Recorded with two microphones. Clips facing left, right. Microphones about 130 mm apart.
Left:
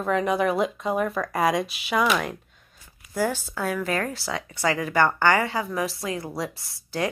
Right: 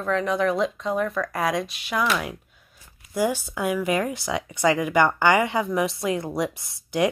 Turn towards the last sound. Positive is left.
turn(degrees=-20)  # may be behind; listen again after turning